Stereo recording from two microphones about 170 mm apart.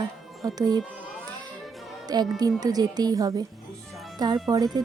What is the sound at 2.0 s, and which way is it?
Speech, 25° right (ahead or behind).